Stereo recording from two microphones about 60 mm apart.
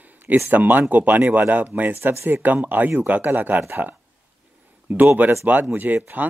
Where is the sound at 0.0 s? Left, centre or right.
Right.